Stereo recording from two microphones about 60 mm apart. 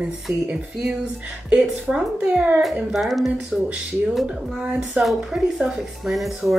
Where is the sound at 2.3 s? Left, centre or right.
Right.